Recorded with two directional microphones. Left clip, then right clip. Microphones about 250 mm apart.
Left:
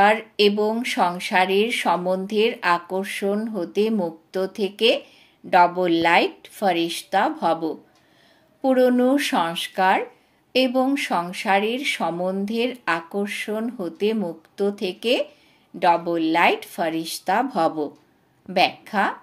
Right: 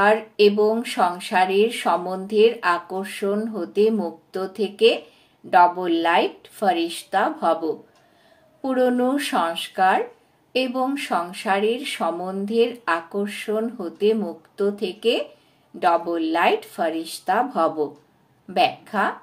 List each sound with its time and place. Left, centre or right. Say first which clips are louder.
0.0 s speech: even; left
8.8 s speech: left 2 dB; left